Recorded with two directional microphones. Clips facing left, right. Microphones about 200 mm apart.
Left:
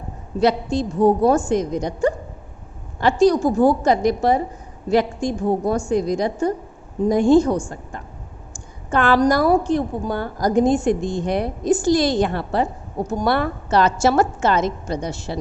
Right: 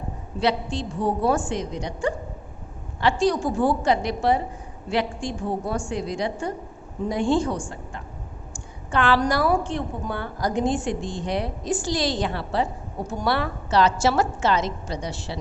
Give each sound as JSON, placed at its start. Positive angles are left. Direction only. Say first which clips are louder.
{"t": 0.3, "sound": "a woman's voice", "louder": "left 6 dB", "side_deg": 45}
{"t": 8.9, "sound": "a woman's voice", "louder": "left 5 dB", "side_deg": 45}